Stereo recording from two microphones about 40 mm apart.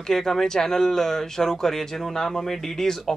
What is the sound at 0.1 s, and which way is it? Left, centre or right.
Speech, centre.